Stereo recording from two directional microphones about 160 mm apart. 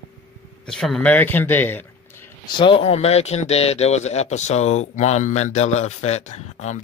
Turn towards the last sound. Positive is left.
turn(degrees=45)  # may be behind; listen again after turning